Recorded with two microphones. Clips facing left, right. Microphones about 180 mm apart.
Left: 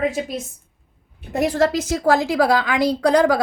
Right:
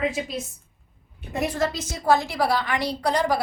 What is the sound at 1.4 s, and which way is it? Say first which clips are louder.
A woman's voice: left 7 dB; 90° left.